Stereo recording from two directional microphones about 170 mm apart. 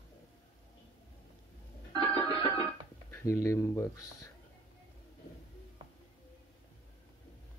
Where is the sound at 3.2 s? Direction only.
15° left (ahead or behind).